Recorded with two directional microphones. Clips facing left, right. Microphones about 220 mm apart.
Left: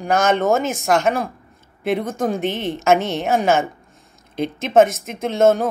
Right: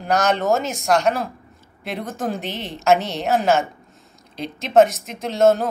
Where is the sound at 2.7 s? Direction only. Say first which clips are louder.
Right 1 dB; centre (ahead or behind).